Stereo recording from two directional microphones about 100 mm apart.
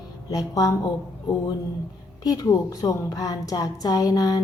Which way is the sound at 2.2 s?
40° left (ahead or behind).